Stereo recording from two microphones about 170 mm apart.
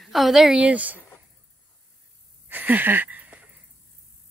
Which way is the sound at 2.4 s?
10° right (ahead or behind).